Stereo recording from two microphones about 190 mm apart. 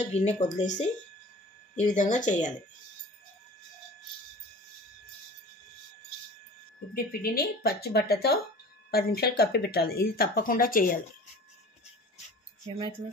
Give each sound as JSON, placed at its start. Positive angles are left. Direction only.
{"t": 0.0, "sound": "speech", "side_deg": 35}
{"t": 6.9, "sound": "speech", "side_deg": 50}